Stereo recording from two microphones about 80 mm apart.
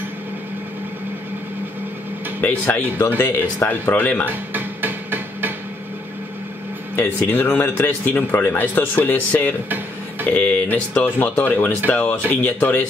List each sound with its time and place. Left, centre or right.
2.4 s a man's voice: left
4.3 s hammer: right
7.0 s a man's voice: left